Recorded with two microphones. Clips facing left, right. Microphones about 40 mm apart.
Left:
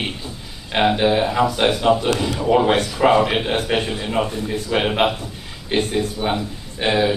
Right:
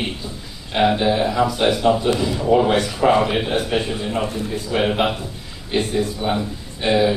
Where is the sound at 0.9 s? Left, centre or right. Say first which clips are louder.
Left 1 dB; left.